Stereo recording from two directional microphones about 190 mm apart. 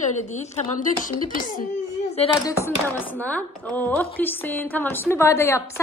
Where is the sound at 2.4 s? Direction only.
10° left (ahead or behind).